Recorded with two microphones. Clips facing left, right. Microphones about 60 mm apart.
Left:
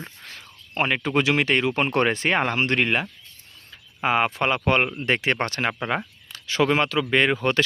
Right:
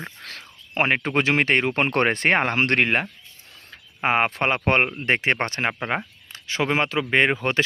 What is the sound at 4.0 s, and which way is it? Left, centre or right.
Speech, right.